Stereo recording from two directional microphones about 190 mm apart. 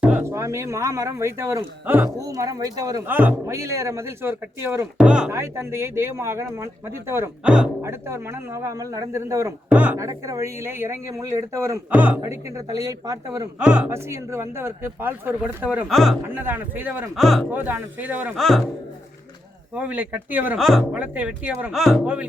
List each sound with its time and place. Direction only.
0.0 s speech: 10° right (ahead or behind)
13.7 s speech: 5° right (ahead or behind)
16.2 s speech: 10° right (ahead or behind)
19.7 s speech: 10° right (ahead or behind)